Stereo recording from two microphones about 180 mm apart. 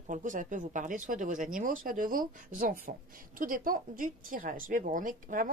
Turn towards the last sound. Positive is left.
turn(degrees=-45)  # may be behind; listen again after turning